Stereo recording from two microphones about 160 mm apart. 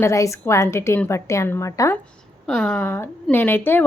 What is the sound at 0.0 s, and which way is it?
A woman's voice, 20° left (ahead or behind).